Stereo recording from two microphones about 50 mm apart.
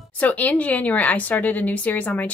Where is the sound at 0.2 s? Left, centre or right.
Left.